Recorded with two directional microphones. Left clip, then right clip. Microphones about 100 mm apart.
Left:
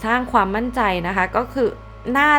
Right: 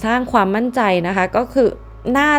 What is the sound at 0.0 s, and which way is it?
A woman's voice, 35° right (ahead or behind).